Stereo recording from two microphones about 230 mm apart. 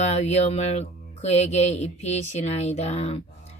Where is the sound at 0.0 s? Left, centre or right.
Left.